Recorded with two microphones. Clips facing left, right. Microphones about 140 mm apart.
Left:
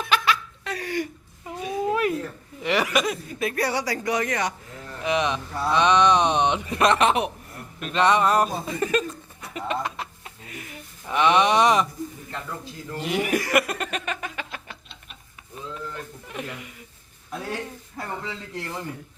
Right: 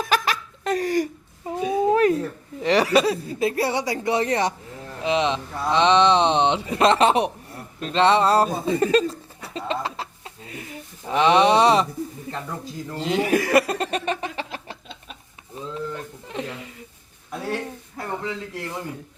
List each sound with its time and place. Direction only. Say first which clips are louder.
0.0 s laughter: right 1 dB; 40° right (ahead or behind)
1.5 s a sound: right 6 dB; 30° right (ahead or behind)
2.6 s speech: right 5 dB; 35° right (ahead or behind)
12.9 s speech: right 3 dB; 25° right (ahead or behind)
15.7 s a sound: right 5 dB; 25° right (ahead or behind)
17.4 s speech: right 5 dB; 5° right (ahead or behind)